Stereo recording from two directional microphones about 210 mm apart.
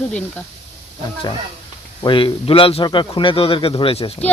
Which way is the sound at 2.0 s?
25° left (ahead or behind).